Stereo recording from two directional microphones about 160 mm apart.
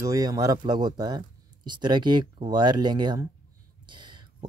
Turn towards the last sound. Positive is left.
turn(degrees=-30)  # may be behind; listen again after turning